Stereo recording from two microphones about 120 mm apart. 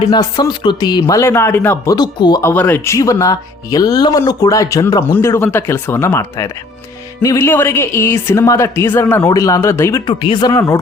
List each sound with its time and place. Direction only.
0.1 s speech: 35° left (ahead or behind); by 1.9 s 20° left (ahead or behind)
1.9 s speech: 35° left (ahead or behind)
2.4 s speech: 15° left (ahead or behind)
10.1 s speech: 45° left (ahead or behind)
10.5 s speech: 25° left (ahead or behind)